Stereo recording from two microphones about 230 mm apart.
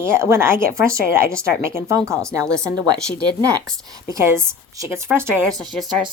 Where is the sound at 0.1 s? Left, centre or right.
Centre.